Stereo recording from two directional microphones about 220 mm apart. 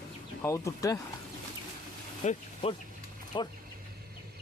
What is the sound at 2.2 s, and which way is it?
Speech, 30° left (ahead or behind).